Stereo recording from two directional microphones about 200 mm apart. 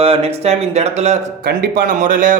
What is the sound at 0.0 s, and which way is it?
Speech, 30° right (ahead or behind).